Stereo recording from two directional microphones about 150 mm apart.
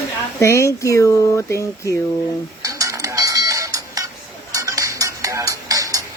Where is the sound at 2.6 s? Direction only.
20° right (ahead or behind).